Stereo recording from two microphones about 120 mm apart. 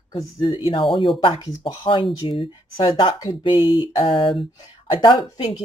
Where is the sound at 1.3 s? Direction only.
30° left (ahead or behind).